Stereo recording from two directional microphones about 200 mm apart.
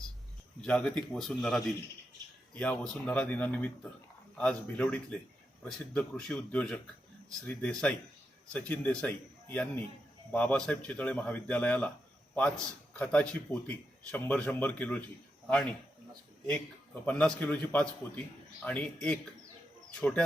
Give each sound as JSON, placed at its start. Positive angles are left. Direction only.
{"t": 0.6, "sound": "speech", "side_deg": 5}
{"t": 12.9, "sound": "speech", "side_deg": 5}
{"t": 16.5, "sound": "speech", "side_deg": 5}